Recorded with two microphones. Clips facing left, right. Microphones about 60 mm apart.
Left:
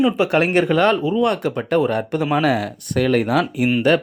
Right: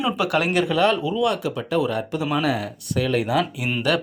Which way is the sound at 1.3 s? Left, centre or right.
Left.